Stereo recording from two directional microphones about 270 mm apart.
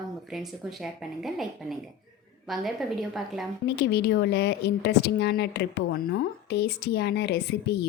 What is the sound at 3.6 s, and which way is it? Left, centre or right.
A woman's voice, left.